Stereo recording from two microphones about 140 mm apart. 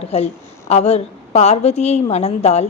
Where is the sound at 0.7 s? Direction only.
50° left (ahead or behind).